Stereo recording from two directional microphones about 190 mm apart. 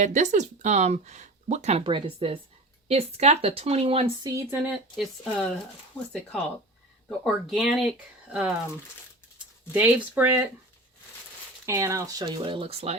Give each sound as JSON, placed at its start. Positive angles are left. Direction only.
{"t": 0.0, "sound": "speech", "side_deg": -40}
{"t": 4.4, "sound": "speech", "side_deg": -10}
{"t": 4.7, "sound": "speech", "side_deg": 0}
{"t": 7.3, "sound": "speech", "side_deg": 0}
{"t": 9.7, "sound": "speech", "side_deg": -10}
{"t": 11.6, "sound": "speech", "side_deg": -15}